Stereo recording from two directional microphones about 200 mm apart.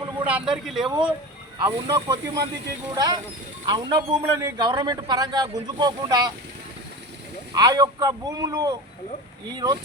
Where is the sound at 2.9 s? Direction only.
20° right (ahead or behind).